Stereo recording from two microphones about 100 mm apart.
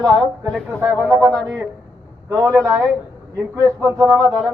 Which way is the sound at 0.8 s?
20° right (ahead or behind).